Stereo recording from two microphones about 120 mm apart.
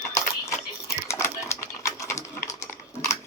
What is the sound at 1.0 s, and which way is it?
Typewriter, 20° left (ahead or behind).